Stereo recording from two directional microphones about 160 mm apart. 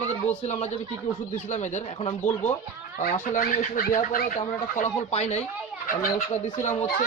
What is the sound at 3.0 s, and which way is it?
Speech, 55° left (ahead or behind).